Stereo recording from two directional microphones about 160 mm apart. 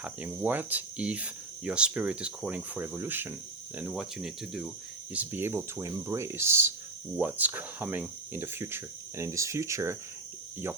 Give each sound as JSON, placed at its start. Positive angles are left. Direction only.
{"t": 0.0, "sound": "speech", "side_deg": -10}